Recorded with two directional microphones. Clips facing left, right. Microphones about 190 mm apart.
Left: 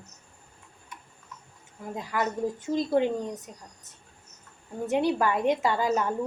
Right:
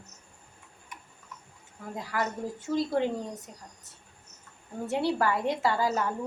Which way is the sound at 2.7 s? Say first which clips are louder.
Left 2 dB; 20° left (ahead or behind).